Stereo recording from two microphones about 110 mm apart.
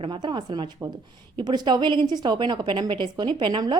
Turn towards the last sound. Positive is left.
turn(degrees=-45)  # may be behind; listen again after turning